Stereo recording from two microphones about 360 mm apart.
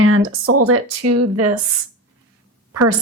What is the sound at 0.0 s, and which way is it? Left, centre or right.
Speech, right.